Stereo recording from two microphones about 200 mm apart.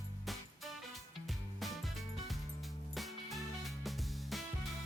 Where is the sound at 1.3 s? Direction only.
Centre (ahead or behind).